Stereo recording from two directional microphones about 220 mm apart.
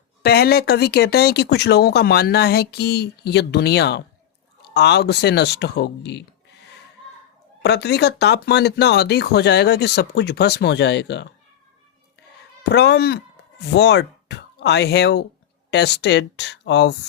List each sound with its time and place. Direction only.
0.2 s speech: 45° left (ahead or behind)
7.6 s speech: 50° left (ahead or behind)
12.6 s speech: 50° left (ahead or behind)